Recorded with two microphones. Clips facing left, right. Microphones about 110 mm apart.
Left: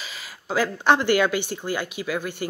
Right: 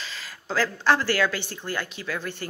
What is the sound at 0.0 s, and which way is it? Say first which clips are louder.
Speech: even; 10° left (ahead or behind).